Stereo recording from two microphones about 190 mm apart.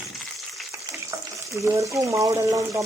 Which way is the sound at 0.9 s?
15° right (ahead or behind).